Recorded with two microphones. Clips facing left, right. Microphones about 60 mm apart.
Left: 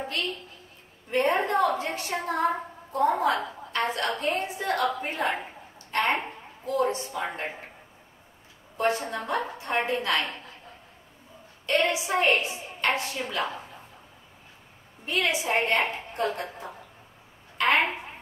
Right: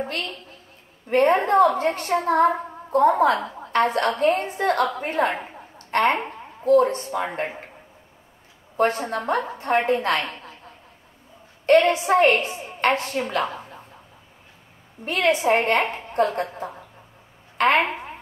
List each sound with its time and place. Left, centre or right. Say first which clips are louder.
1.1 s a woman's voice: right 7 dB; right
2.4 s a woman's voice: right 6 dB; right
8.7 s a woman's voice: right 5 dB; right
9.8 s a woman's voice: right 5 dB; right
11.6 s a woman's voice: right 9 dB; right
15.0 s a woman's voice: right 7 dB; right